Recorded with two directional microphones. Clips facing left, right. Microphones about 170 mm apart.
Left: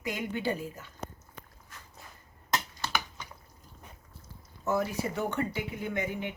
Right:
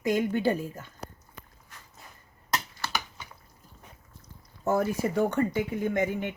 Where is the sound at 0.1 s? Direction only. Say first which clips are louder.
Right 7 dB; 45° right (ahead or behind).